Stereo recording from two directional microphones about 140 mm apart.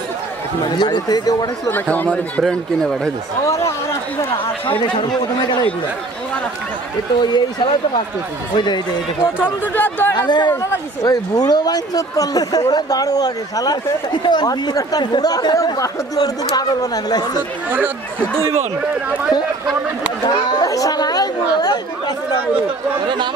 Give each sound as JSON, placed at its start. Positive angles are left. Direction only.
{"t": 0.7, "sound": "speech", "side_deg": 30}
{"t": 1.7, "sound": "speech", "side_deg": 15}
{"t": 2.0, "sound": "speech", "side_deg": 0}
{"t": 7.2, "sound": "speech", "side_deg": 30}
{"t": 8.5, "sound": "speech", "side_deg": 30}
{"t": 9.4, "sound": "speech", "side_deg": 15}
{"t": 10.1, "sound": "speech", "side_deg": 30}
{"t": 17.6, "sound": "speech", "side_deg": -10}
{"t": 20.6, "sound": "a woman's voice", "side_deg": 25}
{"t": 22.9, "sound": "speech", "side_deg": -35}